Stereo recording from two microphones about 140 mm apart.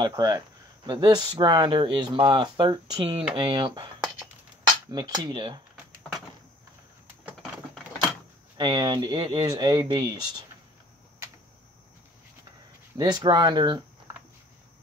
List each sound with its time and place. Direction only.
0.0 s speech: 30° right (ahead or behind)
4.9 s speech: 30° right (ahead or behind)
8.5 s speech: 30° right (ahead or behind)
12.9 s speech: 30° right (ahead or behind)